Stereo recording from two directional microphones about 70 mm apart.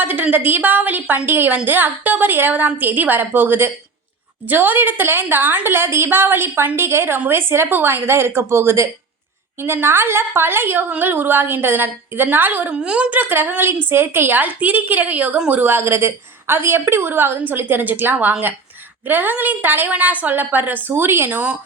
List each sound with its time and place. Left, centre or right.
0.0 s a woman's voice: right
12.7 s a woman's voice: centre; by 21.2 s right
21.2 s a woman's voice: right